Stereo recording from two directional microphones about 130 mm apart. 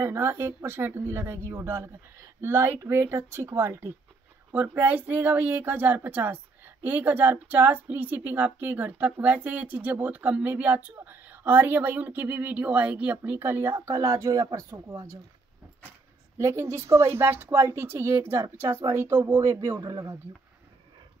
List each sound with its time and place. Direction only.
0.0 s speech: 20° right (ahead or behind)
16.3 s speech: 20° right (ahead or behind)